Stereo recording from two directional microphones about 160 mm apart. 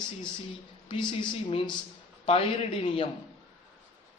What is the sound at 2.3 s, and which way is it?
Speech, 35° left (ahead or behind).